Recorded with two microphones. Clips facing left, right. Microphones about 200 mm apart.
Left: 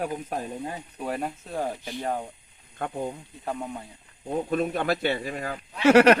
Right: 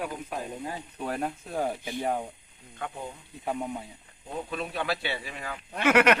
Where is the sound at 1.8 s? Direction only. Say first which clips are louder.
Right 1 dB; 15° right (ahead or behind).